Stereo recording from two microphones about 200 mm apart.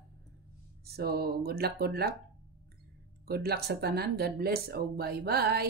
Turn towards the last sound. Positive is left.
turn(degrees=-50)  # may be behind; listen again after turning